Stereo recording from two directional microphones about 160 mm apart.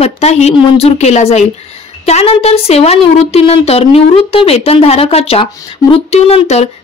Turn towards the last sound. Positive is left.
turn(degrees=40)  # may be behind; listen again after turning